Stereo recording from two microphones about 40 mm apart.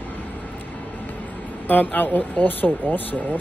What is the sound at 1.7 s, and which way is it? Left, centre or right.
Speech, left.